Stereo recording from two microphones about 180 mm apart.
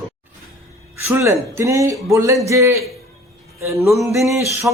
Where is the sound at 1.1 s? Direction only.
15° right (ahead or behind).